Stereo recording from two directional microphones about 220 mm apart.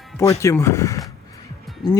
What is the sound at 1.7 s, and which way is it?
Music, centre (ahead or behind).